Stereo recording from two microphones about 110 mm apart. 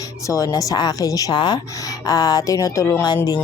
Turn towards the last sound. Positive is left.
turn(degrees=30)  # may be behind; listen again after turning